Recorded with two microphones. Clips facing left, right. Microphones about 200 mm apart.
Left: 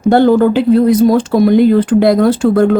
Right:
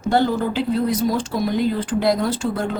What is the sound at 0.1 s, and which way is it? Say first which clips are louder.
Speech: left 11 dB; 65° left (ahead or behind).